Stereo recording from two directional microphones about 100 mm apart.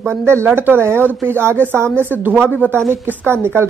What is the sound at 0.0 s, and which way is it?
A woman's voice, 25° right (ahead or behind).